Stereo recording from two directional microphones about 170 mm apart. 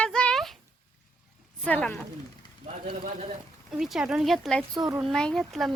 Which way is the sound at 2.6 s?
55° right (ahead or behind).